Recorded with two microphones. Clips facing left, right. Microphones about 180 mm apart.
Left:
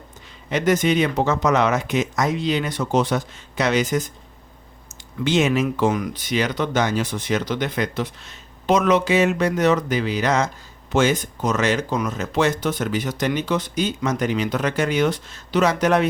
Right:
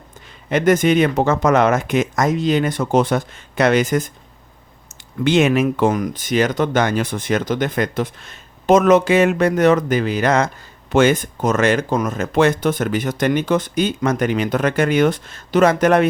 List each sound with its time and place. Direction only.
0.5 s speech: 50° right (ahead or behind)
5.2 s speech: 60° right (ahead or behind)